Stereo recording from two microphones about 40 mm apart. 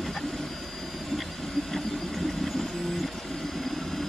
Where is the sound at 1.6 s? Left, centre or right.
Centre.